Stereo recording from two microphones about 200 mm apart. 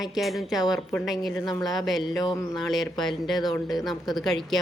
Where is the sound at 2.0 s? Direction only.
25° left (ahead or behind).